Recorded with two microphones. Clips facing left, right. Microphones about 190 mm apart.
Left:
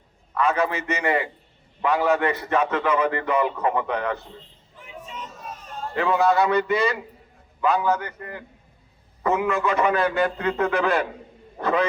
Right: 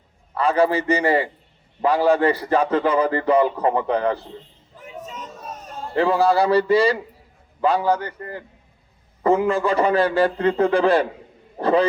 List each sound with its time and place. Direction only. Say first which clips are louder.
0.3 s a man's voice: right 4 dB; 30° right (ahead or behind)
4.8 s a sound: right 3 dB; 40° right (ahead or behind)
7.6 s a man's voice: right 2 dB; 30° right (ahead or behind)